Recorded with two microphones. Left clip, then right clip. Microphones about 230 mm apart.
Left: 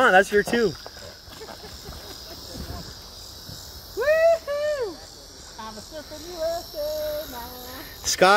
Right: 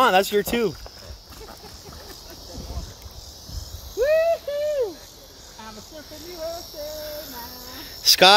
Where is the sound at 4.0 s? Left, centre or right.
Left.